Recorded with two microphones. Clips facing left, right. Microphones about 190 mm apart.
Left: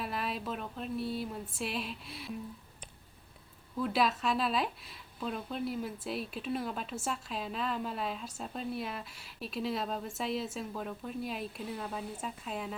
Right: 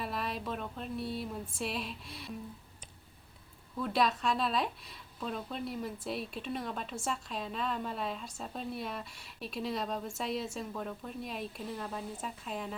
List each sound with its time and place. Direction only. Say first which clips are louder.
0.0 s speech: even; centre (ahead or behind)
3.8 s speech: even; centre (ahead or behind)